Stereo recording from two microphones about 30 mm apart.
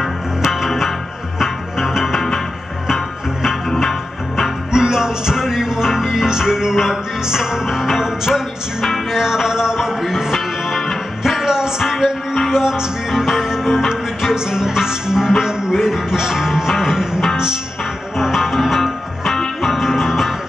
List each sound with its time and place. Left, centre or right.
0.5 s music: centre
3.4 s music: centre
4.7 s music: centre
14.3 s speech: centre
15.7 s music: centre